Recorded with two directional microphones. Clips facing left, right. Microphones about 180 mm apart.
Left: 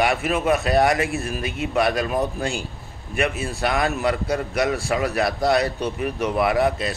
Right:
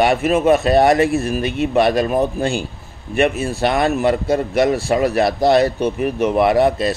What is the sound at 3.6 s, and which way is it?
Speech, 30° right (ahead or behind).